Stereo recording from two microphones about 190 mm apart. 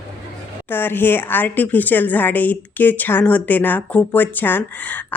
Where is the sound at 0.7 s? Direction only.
10° left (ahead or behind).